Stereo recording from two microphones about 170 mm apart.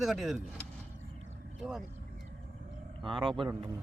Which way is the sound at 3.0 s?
30° right (ahead or behind).